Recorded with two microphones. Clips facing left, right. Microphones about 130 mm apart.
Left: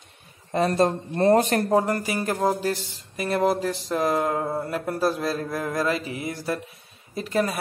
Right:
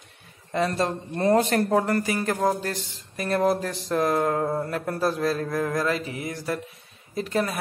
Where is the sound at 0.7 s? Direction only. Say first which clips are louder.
Left 4 dB; 45° left (ahead or behind).